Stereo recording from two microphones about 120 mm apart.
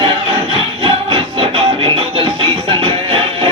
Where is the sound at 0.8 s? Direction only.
45° right (ahead or behind).